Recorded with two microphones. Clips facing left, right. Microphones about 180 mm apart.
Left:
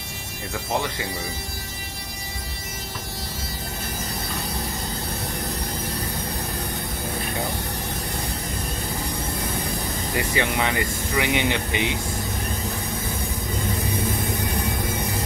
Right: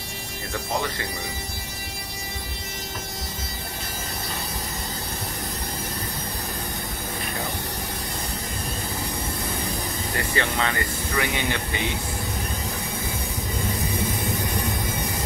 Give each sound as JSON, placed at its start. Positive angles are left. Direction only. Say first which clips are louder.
{"t": 10.1, "sound": "speech", "louder": "left 2 dB", "side_deg": 15}